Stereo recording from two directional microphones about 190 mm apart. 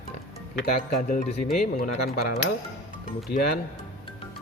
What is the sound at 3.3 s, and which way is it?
Speech, 55° left (ahead or behind).